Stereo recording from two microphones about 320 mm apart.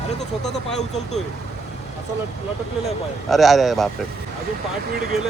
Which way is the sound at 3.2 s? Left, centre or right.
Centre.